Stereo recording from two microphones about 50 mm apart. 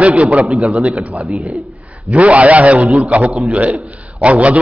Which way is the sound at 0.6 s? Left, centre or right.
Right.